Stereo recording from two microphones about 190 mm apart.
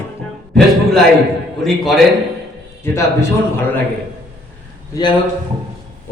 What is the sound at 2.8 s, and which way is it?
Speech, 15° left (ahead or behind).